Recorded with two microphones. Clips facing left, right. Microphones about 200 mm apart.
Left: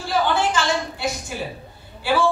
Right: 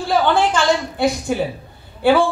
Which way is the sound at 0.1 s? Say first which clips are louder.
Right 4 dB; 55° right (ahead or behind).